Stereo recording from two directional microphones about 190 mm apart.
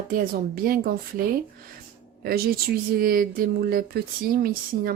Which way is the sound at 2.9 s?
50° right (ahead or behind).